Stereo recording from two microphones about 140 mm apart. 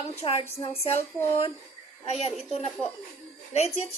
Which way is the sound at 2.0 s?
45° left (ahead or behind).